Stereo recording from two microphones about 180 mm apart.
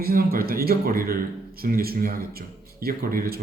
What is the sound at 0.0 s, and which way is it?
A man's voice, 55° right (ahead or behind).